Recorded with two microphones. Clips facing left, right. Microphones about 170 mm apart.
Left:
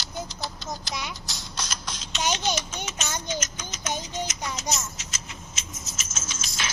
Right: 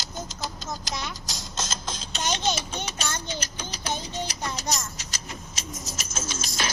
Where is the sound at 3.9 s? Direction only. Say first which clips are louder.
Left 1 dB; 15° left (ahead or behind).